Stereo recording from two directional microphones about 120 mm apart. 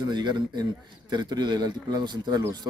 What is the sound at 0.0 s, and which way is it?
Speech, 40° right (ahead or behind).